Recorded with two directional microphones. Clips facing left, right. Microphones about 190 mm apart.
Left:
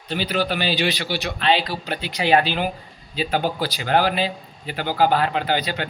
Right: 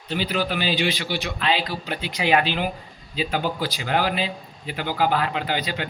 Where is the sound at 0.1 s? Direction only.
35° left (ahead or behind).